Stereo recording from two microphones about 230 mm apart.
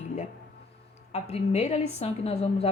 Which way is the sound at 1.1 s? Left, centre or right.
Left.